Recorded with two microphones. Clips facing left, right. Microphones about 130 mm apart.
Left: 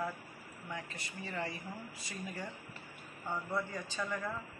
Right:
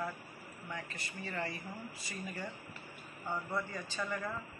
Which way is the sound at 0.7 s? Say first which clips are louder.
Even; centre (ahead or behind).